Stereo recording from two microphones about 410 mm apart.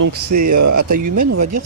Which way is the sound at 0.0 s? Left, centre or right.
Right.